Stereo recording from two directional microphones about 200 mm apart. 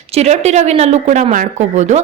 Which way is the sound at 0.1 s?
35° right (ahead or behind).